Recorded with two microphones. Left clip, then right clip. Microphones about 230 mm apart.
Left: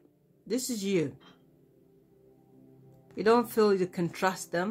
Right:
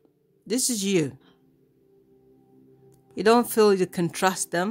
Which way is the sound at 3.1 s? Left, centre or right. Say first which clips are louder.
Right 5 dB; right.